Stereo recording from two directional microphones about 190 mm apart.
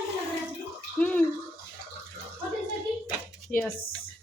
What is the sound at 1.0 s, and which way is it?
Bathtub, 10° left (ahead or behind).